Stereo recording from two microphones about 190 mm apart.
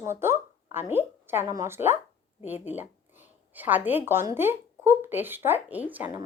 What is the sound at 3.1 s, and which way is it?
Speech, 10° right (ahead or behind).